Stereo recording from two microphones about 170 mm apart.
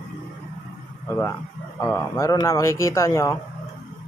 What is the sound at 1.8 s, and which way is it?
Speech, 20° left (ahead or behind).